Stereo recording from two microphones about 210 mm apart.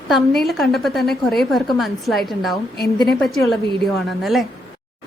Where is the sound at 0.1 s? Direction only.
Centre (ahead or behind).